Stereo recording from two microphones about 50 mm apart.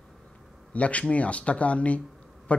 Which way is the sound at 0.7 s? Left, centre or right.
Left.